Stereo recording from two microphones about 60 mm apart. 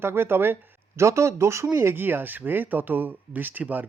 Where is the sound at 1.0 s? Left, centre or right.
Right.